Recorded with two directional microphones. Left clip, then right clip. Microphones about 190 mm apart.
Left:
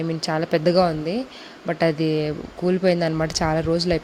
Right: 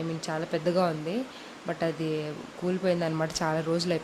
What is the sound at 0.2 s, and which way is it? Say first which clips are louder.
A woman's voice: left 11 dB; 35° left (ahead or behind).